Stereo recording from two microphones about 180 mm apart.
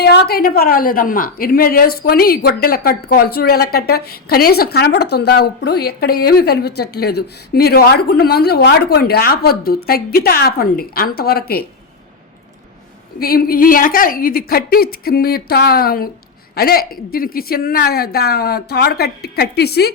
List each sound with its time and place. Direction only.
0.0 s a woman's voice: 60° left (ahead or behind)
13.1 s a woman's voice: 55° left (ahead or behind)